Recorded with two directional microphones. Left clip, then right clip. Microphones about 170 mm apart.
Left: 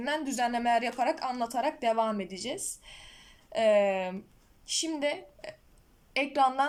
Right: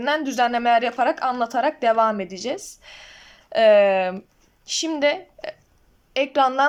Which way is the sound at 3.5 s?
50° right (ahead or behind).